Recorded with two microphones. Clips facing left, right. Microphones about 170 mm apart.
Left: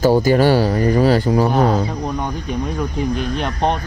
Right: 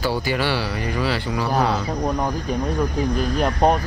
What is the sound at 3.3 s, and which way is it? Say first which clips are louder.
Speech: right 2 dB; 5° right (ahead or behind).